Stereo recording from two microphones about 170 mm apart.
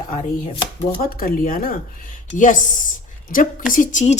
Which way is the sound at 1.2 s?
60° left (ahead or behind).